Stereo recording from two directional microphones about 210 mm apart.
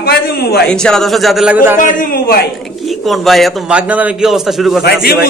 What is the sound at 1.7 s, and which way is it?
Speech, 45° left (ahead or behind).